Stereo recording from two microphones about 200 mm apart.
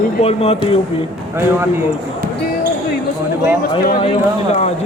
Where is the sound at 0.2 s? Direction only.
30° left (ahead or behind).